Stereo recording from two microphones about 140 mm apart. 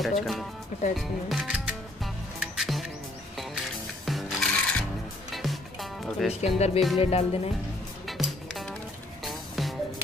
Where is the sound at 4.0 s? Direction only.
Centre (ahead or behind).